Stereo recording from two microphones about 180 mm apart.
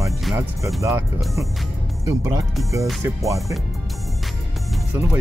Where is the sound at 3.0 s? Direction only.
15° right (ahead or behind).